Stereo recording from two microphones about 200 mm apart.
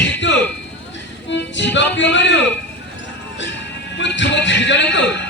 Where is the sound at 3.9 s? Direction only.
65° left (ahead or behind).